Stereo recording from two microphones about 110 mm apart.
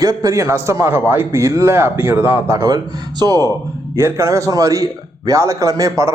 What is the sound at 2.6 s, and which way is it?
A man's voice, 40° right (ahead or behind).